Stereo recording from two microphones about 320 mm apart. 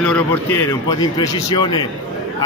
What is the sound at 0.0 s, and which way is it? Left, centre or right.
A man's voice, centre.